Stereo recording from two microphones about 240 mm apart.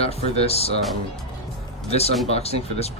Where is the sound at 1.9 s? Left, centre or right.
Left.